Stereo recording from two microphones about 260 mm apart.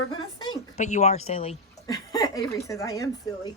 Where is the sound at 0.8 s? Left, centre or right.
Left.